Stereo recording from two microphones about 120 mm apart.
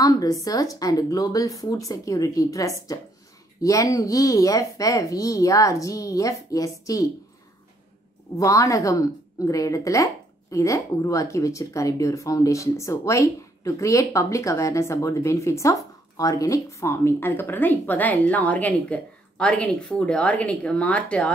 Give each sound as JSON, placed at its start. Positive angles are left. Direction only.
{"t": 0.0, "sound": "speech", "side_deg": 30}
{"t": 8.4, "sound": "speech", "side_deg": 25}